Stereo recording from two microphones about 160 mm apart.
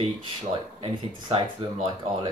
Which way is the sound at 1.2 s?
35° right (ahead or behind).